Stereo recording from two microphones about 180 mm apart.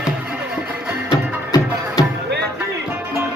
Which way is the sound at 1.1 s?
20° left (ahead or behind).